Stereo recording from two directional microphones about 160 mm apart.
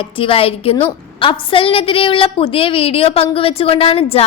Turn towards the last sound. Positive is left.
turn(degrees=35)  # may be behind; listen again after turning